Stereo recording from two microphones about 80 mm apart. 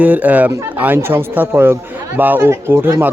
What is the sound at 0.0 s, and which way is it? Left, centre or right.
A man's voice, centre.